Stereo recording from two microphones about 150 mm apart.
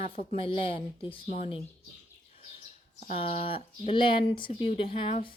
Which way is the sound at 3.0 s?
40° left (ahead or behind).